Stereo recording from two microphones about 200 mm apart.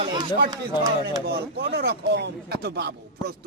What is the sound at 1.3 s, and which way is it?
Speech, 55° right (ahead or behind).